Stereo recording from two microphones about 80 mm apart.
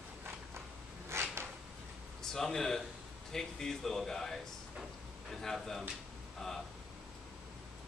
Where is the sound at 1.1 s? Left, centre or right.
Right.